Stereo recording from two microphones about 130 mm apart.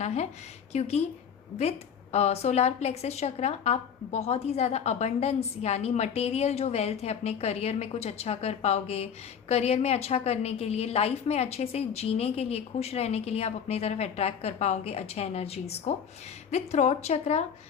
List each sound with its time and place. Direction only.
0.0 s speech: 60° left (ahead or behind)
2.1 s a woman's voice: 55° left (ahead or behind)